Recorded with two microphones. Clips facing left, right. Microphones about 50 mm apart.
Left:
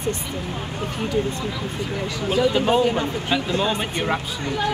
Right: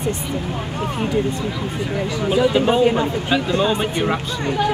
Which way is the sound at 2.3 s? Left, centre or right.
Centre.